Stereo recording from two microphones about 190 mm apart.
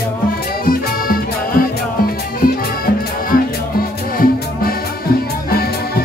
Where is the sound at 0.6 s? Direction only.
50° left (ahead or behind).